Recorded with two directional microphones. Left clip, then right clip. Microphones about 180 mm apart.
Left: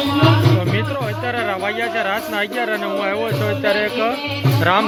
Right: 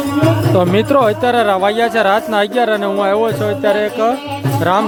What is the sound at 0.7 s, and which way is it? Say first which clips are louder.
Speech: right 10 dB; 50° right (ahead or behind).